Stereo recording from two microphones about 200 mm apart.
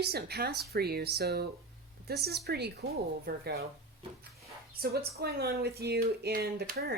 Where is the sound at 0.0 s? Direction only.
50° right (ahead or behind).